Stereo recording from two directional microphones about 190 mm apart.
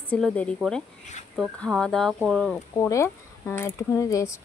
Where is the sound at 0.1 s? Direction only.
5° left (ahead or behind).